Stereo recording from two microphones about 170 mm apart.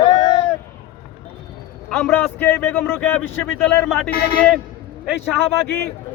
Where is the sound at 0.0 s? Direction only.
25° left (ahead or behind).